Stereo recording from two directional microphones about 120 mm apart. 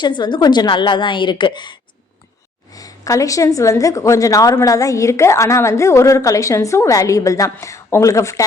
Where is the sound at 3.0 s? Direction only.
25° left (ahead or behind).